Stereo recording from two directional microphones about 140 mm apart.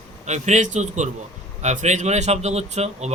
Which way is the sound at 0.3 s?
55° right (ahead or behind).